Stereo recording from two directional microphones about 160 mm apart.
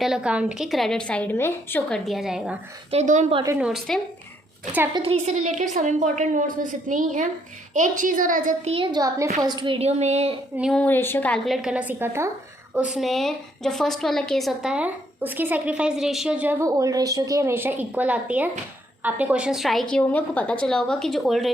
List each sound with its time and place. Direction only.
0.0 s a woman's voice: 5° right (ahead or behind); by 1.8 s 15° left (ahead or behind)
1.9 s a woman's voice: centre (ahead or behind)
2.9 s a woman's voice: 45° right (ahead or behind)
3.5 s a woman's voice: 5° right (ahead or behind)
4.9 s a woman's voice: 40° right (ahead or behind); by 8.7 s 55° right (ahead or behind)
8.7 s a child's voice: 30° right (ahead or behind)
10.6 s a woman's voice: 5° left (ahead or behind)